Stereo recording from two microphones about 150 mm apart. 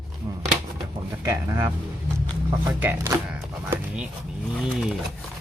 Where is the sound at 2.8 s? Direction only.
15° right (ahead or behind).